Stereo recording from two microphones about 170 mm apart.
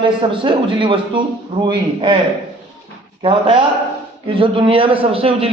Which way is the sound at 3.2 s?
30° right (ahead or behind).